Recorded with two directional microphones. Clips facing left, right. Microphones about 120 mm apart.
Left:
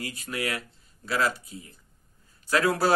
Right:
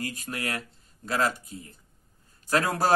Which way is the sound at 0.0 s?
45° right (ahead or behind).